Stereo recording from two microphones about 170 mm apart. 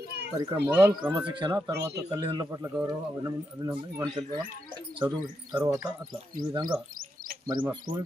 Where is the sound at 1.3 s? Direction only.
30° right (ahead or behind).